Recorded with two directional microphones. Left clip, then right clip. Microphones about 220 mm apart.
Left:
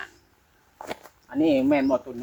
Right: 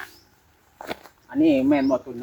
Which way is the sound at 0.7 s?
10° left (ahead or behind).